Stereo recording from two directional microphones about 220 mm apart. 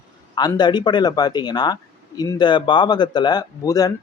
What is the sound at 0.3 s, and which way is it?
A man's voice, 20° left (ahead or behind).